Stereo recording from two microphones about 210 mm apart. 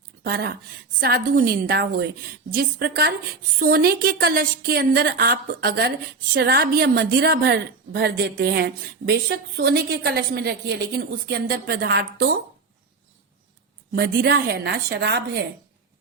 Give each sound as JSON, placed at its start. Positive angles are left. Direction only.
{"t": 0.2, "sound": "a woman's voice", "side_deg": -50}
{"t": 13.9, "sound": "a woman's voice", "side_deg": -50}